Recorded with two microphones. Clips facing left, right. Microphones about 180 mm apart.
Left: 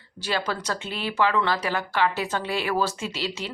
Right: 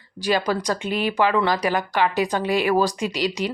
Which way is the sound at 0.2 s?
15° right (ahead or behind).